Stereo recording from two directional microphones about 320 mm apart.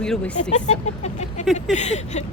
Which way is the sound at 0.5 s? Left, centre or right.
Left.